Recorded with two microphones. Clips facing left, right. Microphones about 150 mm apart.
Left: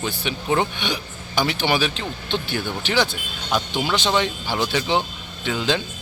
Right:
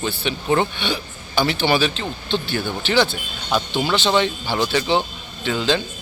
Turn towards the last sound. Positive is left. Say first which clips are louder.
# right 2 dB
turn(degrees=10)  # may be behind; listen again after turning